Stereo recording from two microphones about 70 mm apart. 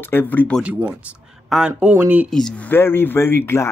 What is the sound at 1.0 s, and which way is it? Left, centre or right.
Speech, centre.